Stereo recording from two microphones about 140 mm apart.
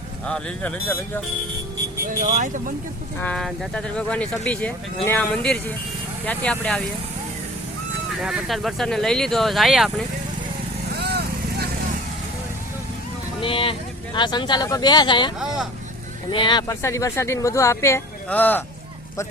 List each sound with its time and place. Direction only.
0.3 s speech: 5° left (ahead or behind)
2.0 s speech: 70° right (ahead or behind)
3.2 s speech: 5° left (ahead or behind)
8.2 s speech: centre (ahead or behind)
13.4 s speech: 40° left (ahead or behind)
16.3 s speech: 35° left (ahead or behind)
16.8 s speech: 20° left (ahead or behind)